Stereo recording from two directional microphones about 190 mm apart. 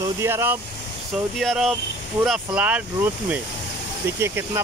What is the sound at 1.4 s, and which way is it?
Speech, centre (ahead or behind).